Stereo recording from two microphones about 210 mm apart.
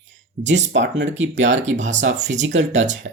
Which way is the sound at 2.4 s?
60° right (ahead or behind).